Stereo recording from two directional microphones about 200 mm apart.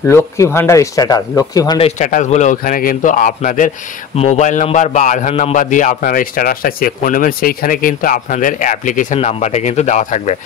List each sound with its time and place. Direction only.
0.0 s speech: 15° left (ahead or behind)
1.8 s a man's voice: 35° left (ahead or behind)